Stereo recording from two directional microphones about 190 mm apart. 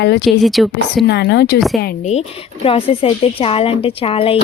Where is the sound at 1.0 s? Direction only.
65° left (ahead or behind).